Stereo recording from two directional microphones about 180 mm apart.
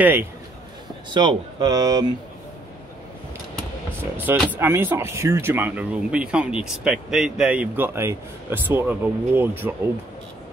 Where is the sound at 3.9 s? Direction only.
10° right (ahead or behind).